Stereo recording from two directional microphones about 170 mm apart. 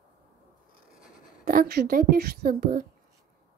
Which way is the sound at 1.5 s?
60° right (ahead or behind).